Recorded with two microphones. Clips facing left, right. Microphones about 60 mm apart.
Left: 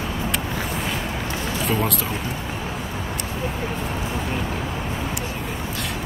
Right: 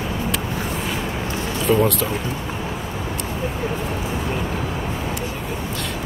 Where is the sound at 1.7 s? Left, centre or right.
Centre.